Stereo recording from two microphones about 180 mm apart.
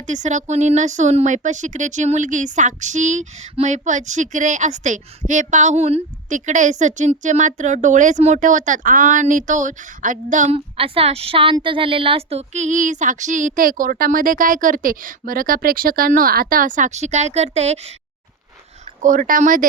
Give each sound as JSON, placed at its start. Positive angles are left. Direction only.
{"t": 0.1, "sound": "speech", "side_deg": -40}
{"t": 19.0, "sound": "speech", "side_deg": -45}